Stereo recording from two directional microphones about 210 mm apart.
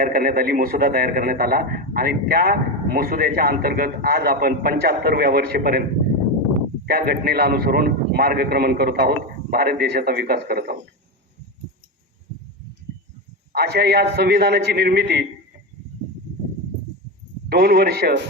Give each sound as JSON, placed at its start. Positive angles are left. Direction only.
{"t": 0.0, "sound": "a man's voice", "side_deg": -45}
{"t": 6.8, "sound": "a man's voice", "side_deg": -45}
{"t": 13.5, "sound": "a man's voice", "side_deg": -50}
{"t": 17.5, "sound": "a man's voice", "side_deg": -45}